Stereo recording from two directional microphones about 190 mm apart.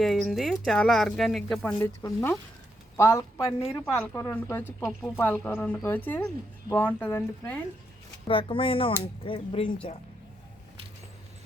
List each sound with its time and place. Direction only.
0.0 s speech: centre (ahead or behind)
1.8 s speech: 15° left (ahead or behind)
8.3 s speech: 25° left (ahead or behind)